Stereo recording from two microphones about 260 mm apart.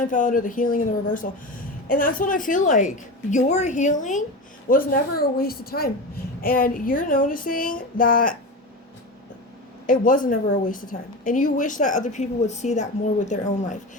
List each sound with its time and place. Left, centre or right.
0.0 s speech: left
9.8 s a woman's voice: left